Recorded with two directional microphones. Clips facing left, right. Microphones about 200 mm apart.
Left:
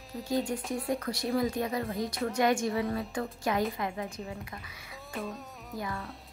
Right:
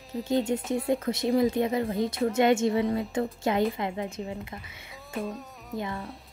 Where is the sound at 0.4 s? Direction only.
25° right (ahead or behind).